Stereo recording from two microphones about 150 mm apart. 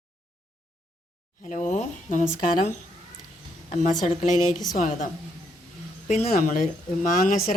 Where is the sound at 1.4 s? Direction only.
55° left (ahead or behind).